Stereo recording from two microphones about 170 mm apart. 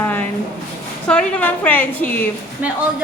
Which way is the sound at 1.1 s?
5° left (ahead or behind).